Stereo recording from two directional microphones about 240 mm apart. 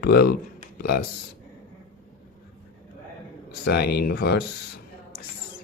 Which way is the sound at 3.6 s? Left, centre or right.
Left.